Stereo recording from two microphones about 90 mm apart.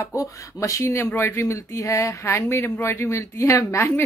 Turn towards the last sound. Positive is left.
turn(degrees=30)  # may be behind; listen again after turning